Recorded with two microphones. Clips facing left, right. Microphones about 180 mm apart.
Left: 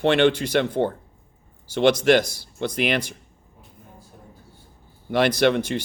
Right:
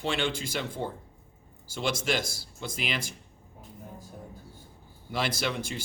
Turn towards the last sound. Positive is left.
turn(degrees=65)  # may be behind; listen again after turning